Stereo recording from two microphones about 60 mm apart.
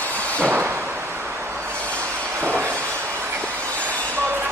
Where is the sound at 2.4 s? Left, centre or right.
Right.